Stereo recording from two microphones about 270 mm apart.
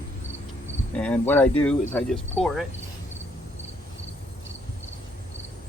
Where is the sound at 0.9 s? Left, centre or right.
Centre.